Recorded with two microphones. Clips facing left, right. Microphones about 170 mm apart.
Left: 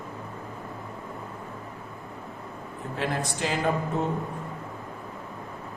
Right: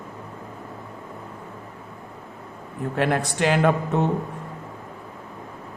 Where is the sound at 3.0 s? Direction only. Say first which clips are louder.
Right 6 dB; 65° right (ahead or behind).